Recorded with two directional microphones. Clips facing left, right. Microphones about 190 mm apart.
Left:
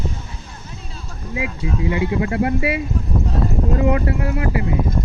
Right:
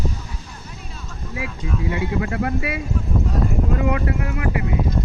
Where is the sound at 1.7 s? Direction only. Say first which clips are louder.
Left 3 dB; 25° left (ahead or behind).